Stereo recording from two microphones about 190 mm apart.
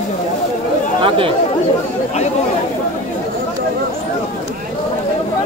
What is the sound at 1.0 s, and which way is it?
Speech, 30° right (ahead or behind).